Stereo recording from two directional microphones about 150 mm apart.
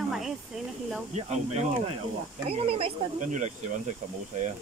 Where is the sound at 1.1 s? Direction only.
50° right (ahead or behind).